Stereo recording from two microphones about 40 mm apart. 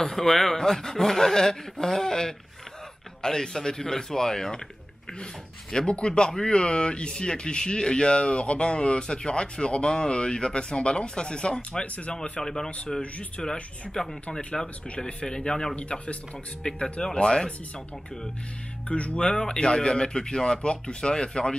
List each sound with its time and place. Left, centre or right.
0.1 s speech: centre
11.8 s speech: left
12.1 s speech: centre
15.7 s speech: left
18.9 s speech: left